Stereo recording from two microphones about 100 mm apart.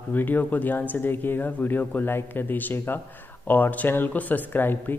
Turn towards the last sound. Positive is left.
turn(degrees=20)  # may be behind; listen again after turning